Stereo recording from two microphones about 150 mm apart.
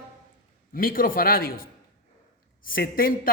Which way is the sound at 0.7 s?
70° left (ahead or behind).